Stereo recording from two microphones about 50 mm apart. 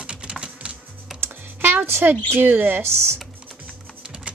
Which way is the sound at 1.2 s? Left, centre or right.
Right.